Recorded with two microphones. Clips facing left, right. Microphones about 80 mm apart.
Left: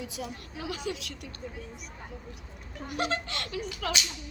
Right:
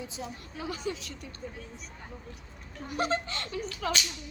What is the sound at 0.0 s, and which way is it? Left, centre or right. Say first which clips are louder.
Speech: left 2 dB; right.